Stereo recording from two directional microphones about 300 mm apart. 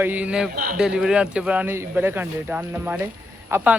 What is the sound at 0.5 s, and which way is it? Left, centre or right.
Speech, right.